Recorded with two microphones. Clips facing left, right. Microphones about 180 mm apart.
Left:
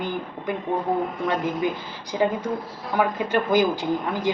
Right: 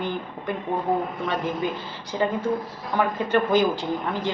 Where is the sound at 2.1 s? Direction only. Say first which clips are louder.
Left 2 dB; 10° left (ahead or behind).